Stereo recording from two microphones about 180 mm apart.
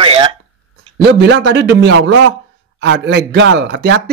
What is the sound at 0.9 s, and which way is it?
Speech, 70° right (ahead or behind).